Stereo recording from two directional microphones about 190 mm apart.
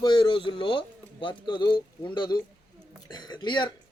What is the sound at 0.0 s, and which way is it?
Speech, 25° left (ahead or behind).